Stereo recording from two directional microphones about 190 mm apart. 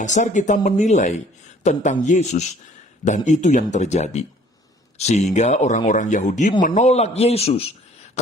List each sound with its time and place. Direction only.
0.0 s speech: 40° left (ahead or behind)